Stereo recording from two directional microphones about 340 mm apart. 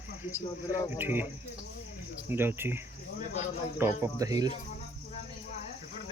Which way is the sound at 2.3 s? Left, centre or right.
Centre.